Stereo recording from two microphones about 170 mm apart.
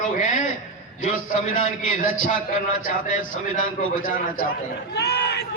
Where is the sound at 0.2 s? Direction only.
50° left (ahead or behind).